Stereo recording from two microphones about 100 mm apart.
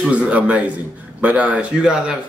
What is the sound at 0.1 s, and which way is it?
A man's voice, 15° right (ahead or behind).